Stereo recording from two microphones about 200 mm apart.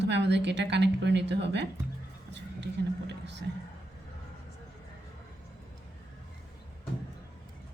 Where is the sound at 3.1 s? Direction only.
60° right (ahead or behind).